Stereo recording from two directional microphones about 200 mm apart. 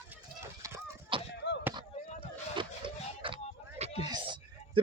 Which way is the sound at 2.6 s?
25° right (ahead or behind).